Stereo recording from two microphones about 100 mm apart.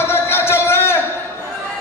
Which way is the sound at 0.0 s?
25° left (ahead or behind).